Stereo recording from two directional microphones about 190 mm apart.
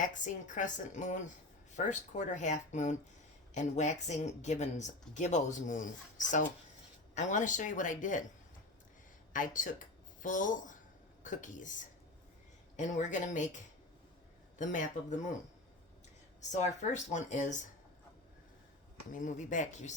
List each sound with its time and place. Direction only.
0.1 s speech: 40° left (ahead or behind)
7.1 s speech: 40° left (ahead or behind)
9.3 s speech: 45° left (ahead or behind)
14.6 s speech: 40° left (ahead or behind)
16.5 s speech: 40° left (ahead or behind)
19.1 s speech: 45° left (ahead or behind)